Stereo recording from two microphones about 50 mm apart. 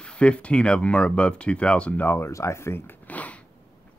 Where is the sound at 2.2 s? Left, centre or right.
Left.